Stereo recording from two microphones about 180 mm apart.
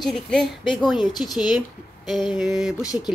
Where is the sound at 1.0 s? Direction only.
25° left (ahead or behind).